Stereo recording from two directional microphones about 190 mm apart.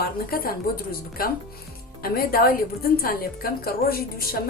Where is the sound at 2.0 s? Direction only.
50° left (ahead or behind).